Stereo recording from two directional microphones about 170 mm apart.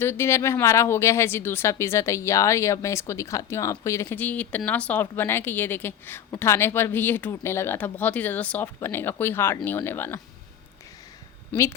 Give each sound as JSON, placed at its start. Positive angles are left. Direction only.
{"t": 0.0, "sound": "speech", "side_deg": 15}
{"t": 11.5, "sound": "speech", "side_deg": 10}